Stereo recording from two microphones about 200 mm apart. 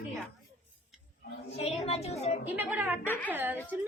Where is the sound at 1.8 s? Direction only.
30° left (ahead or behind).